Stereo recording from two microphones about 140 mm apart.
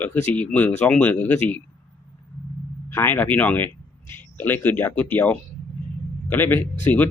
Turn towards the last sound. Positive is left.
turn(degrees=15)  # may be behind; listen again after turning